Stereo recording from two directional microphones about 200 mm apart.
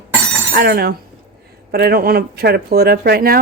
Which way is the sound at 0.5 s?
50° right (ahead or behind).